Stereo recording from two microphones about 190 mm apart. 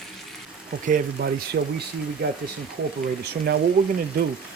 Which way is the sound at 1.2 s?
60° right (ahead or behind).